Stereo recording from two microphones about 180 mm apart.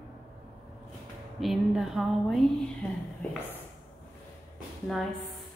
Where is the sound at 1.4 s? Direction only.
Centre (ahead or behind).